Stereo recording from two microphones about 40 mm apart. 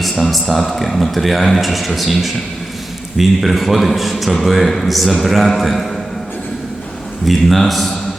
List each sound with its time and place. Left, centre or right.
0.0 s a man's voice: centre
7.3 s a man's voice: centre